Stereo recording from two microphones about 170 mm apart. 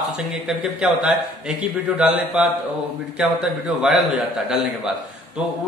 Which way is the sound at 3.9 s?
5° right (ahead or behind).